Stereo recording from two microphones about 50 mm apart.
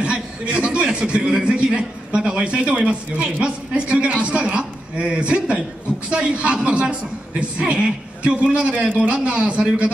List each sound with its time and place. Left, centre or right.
0.0 s a man's voice: right